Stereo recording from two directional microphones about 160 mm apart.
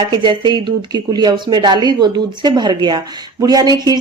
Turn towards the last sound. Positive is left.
turn(degrees=-25)  # may be behind; listen again after turning